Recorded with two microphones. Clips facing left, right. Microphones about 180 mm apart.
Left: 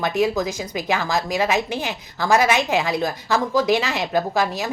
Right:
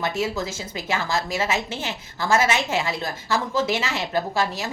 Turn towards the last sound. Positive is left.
turn(degrees=15)  # may be behind; listen again after turning